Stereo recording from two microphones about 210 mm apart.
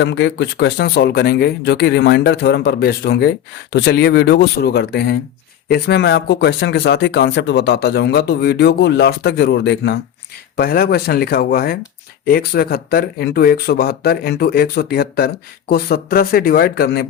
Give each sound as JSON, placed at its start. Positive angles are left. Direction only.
{"t": 0.0, "sound": "speech", "side_deg": 60}
{"t": 10.6, "sound": "speech", "side_deg": 45}